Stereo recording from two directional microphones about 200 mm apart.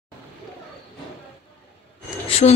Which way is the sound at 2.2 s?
30° left (ahead or behind).